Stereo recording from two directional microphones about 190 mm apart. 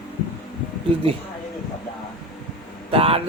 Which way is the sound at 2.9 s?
30° right (ahead or behind).